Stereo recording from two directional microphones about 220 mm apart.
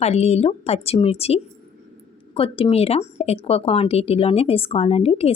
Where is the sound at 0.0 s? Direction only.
30° left (ahead or behind).